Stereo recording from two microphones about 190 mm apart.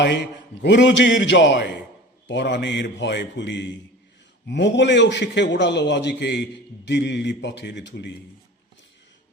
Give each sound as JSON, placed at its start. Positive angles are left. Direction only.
{"t": 0.0, "sound": "a man's voice", "side_deg": 65}